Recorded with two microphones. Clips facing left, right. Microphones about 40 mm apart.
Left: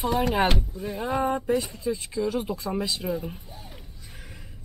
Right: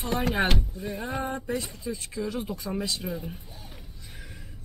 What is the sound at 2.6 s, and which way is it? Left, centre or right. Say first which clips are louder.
Speech: left 3 dB; centre.